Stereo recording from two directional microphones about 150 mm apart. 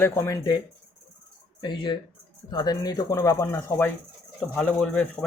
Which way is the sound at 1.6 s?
30° left (ahead or behind).